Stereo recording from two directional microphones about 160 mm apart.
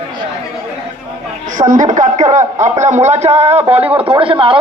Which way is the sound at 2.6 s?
45° right (ahead or behind).